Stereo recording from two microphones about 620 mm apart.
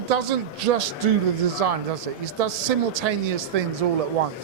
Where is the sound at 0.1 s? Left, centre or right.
Right.